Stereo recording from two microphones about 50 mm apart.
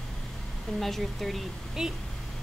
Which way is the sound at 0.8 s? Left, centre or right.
Centre.